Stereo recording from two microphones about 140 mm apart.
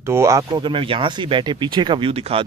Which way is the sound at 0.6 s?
40° right (ahead or behind).